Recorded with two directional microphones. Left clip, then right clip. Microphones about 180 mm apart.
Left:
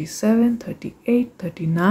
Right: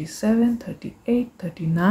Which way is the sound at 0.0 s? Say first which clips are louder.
Left 2 dB; 10° left (ahead or behind).